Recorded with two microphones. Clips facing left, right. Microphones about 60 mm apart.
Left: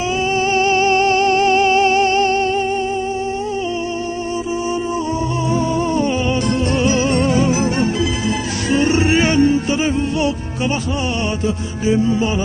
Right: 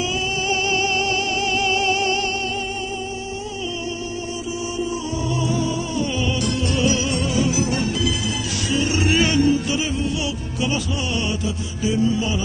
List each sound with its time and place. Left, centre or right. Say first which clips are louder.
0.5 s music: left 7 dB; left
5.5 s music: left 6 dB; left